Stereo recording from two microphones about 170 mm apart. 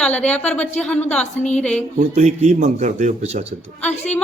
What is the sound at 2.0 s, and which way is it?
A man's voice, 45° right (ahead or behind).